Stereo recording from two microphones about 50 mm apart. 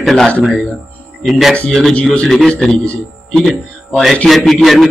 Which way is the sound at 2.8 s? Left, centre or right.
Left.